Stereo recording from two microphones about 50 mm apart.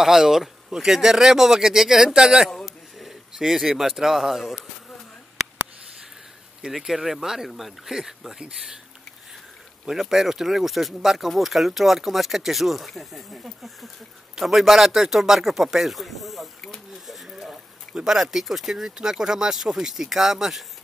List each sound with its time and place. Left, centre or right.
0.0 s speech: centre
2.6 s a sound: centre
6.8 s speech: centre
9.8 s speech: centre
16.7 s a sound: centre
17.9 s speech: centre